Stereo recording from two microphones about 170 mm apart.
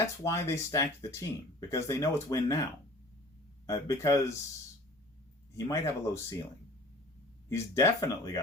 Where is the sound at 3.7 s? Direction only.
20° left (ahead or behind).